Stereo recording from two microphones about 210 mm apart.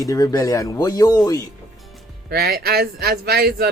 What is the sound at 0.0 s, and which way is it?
Speech, 15° left (ahead or behind).